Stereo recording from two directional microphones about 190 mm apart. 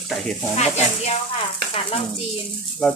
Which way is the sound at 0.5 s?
35° left (ahead or behind).